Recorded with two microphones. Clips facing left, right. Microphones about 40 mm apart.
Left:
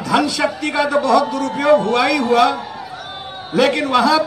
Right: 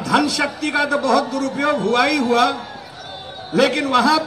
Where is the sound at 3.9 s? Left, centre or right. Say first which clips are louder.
Left 1 dB; centre.